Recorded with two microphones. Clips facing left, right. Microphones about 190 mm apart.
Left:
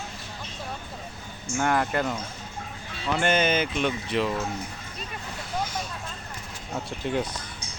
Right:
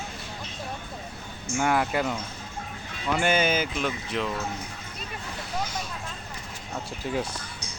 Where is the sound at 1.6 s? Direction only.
5° right (ahead or behind).